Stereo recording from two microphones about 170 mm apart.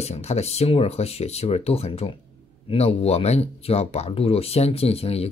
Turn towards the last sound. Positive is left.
turn(degrees=35)  # may be behind; listen again after turning